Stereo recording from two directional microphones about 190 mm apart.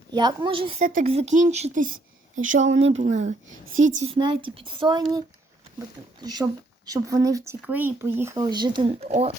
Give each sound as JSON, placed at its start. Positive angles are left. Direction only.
{"t": 0.1, "sound": "speech", "side_deg": -20}
{"t": 2.7, "sound": "speech", "side_deg": -35}
{"t": 6.2, "sound": "speech", "side_deg": -20}